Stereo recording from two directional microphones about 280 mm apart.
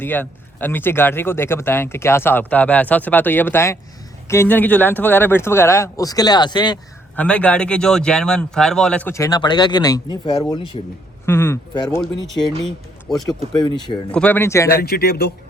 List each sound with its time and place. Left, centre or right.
0.0 s speech: centre
7.2 s speech: centre
12.6 s speech: centre
13.6 s speech: centre
14.1 s speech: centre
14.8 s speech: left